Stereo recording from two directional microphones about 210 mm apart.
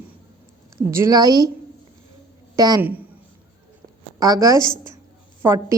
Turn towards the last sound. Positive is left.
turn(degrees=-10)  # may be behind; listen again after turning